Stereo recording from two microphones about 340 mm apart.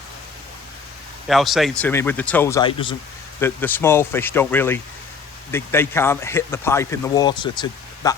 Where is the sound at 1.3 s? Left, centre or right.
Centre.